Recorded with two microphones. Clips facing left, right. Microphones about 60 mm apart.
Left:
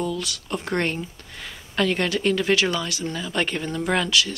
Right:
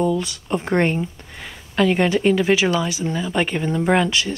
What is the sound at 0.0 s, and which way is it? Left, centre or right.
Speech, right.